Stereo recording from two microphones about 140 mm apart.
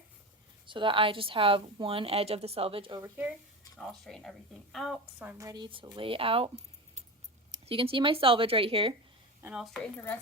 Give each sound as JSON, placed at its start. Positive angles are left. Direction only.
{"t": 0.7, "sound": "a woman's voice", "side_deg": -35}
{"t": 3.0, "sound": "speech", "side_deg": -10}
{"t": 3.8, "sound": "speech", "side_deg": 0}
{"t": 5.4, "sound": "a woman's voice", "side_deg": -30}
{"t": 7.6, "sound": "a woman's voice", "side_deg": -40}
{"t": 9.4, "sound": "speech", "side_deg": -5}
{"t": 9.8, "sound": "speech", "side_deg": 10}